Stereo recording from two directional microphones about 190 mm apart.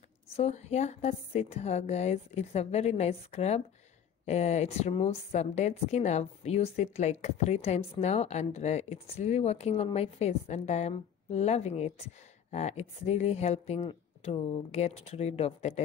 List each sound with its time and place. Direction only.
0.4 s a woman's voice: 35° left (ahead or behind)